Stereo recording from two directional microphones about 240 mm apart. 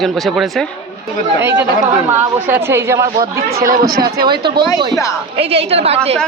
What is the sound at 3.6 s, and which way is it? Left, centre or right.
Speech, right.